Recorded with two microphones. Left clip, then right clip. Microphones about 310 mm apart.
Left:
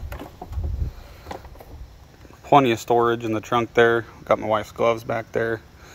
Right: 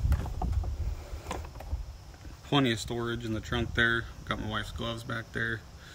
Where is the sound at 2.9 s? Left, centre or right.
Left.